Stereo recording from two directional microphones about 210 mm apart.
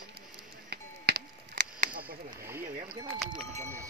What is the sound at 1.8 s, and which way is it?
Speech, 40° right (ahead or behind).